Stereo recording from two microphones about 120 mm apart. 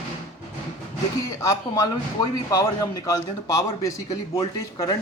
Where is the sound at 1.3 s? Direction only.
25° left (ahead or behind).